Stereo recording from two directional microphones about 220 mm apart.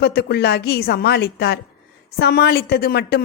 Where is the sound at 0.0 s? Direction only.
45° left (ahead or behind).